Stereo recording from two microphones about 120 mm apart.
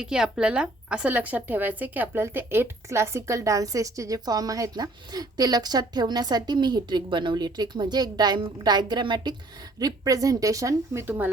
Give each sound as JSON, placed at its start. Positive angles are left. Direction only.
{"t": 0.0, "sound": "a woman's voice", "side_deg": -5}
{"t": 11.0, "sound": "speech", "side_deg": -15}